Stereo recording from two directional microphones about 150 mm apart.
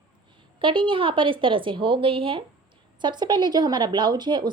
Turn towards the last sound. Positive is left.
turn(degrees=-30)  # may be behind; listen again after turning